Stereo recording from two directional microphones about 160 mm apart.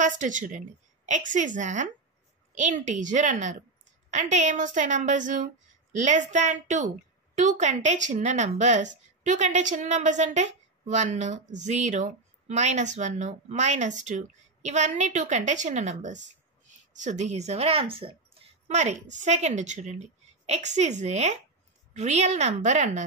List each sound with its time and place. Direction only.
0.0 s a woman's voice: 50° right (ahead or behind)